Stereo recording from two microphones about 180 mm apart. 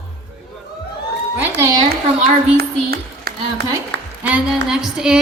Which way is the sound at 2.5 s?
60° right (ahead or behind).